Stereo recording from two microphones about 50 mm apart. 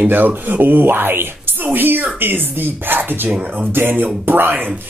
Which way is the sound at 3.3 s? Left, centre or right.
Right.